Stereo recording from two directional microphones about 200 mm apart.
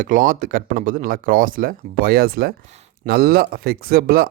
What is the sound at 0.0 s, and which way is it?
Speech, 40° right (ahead or behind).